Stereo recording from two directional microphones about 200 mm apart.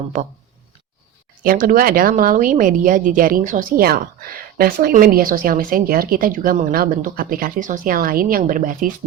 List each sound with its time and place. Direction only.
1.5 s speech: 45° right (ahead or behind)